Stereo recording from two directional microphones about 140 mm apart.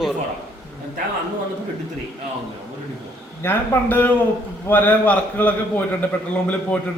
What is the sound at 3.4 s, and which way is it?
A man's voice, 15° left (ahead or behind).